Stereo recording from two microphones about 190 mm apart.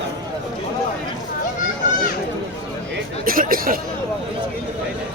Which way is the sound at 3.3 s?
50° right (ahead or behind).